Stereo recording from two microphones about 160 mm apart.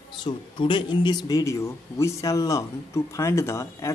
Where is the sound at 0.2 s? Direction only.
30° left (ahead or behind).